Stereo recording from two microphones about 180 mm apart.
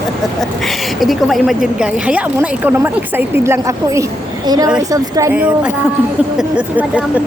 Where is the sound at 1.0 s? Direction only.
Centre (ahead or behind); by 5.3 s 20° right (ahead or behind).